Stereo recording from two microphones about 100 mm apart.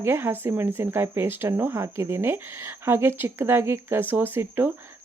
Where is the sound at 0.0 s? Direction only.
20° right (ahead or behind).